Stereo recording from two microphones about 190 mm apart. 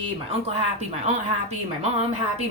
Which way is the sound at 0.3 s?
35° right (ahead or behind).